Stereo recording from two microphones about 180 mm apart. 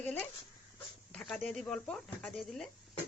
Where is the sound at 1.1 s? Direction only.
5° left (ahead or behind).